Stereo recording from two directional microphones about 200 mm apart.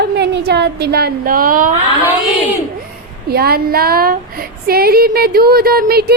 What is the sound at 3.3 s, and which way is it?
A woman's voice, 50° right (ahead or behind).